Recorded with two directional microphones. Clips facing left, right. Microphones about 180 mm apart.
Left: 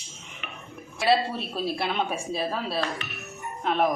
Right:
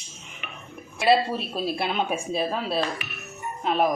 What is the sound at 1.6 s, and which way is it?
Speech, 15° right (ahead or behind).